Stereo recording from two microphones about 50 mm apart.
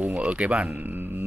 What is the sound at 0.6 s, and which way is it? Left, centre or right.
Speech, right.